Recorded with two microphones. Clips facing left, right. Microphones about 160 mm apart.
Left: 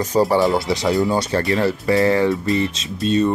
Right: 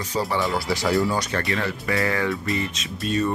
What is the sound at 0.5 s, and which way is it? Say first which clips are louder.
Speech: left 4 dB; 20° left (ahead or behind).